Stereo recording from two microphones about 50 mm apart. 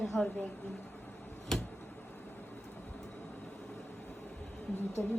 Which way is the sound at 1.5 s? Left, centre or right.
Centre.